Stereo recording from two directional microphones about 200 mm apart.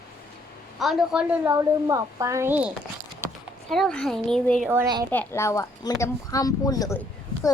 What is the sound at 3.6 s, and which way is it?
Speech, centre (ahead or behind).